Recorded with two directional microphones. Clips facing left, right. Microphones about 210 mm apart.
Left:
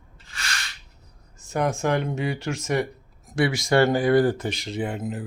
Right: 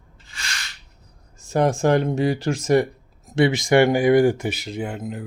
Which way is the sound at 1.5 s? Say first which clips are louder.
Right 5 dB; 35° right (ahead or behind).